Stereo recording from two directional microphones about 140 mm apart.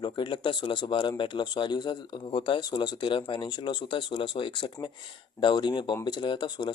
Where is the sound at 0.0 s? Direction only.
35° left (ahead or behind).